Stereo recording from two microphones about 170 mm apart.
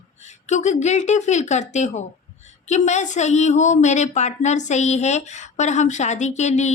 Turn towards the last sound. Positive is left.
turn(degrees=45)  # may be behind; listen again after turning